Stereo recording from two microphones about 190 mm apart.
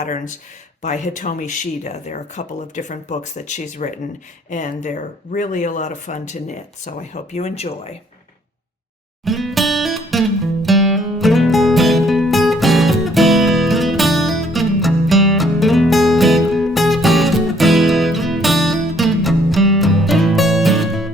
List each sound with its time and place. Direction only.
0.8 s speech: 40° left (ahead or behind)
9.2 s music: centre (ahead or behind)